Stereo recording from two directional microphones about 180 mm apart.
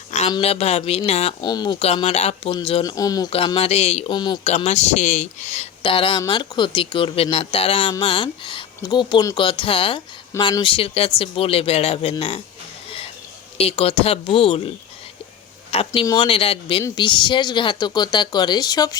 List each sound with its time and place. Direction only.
0.3 s speech: 30° left (ahead or behind)
1.4 s speech: 25° left (ahead or behind)
3.3 s speech: 30° left (ahead or behind)
4.4 s speech: 35° left (ahead or behind)
13.6 s speech: 35° left (ahead or behind)
15.9 s speech: 20° left (ahead or behind)